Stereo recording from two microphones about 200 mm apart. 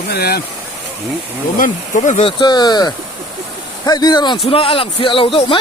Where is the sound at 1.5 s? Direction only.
40° left (ahead or behind).